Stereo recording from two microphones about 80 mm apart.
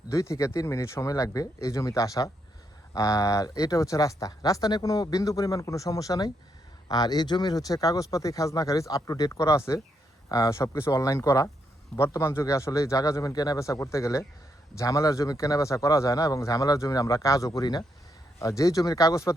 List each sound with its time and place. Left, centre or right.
0.1 s speech: left
9.3 s speech: left
18.3 s speech: left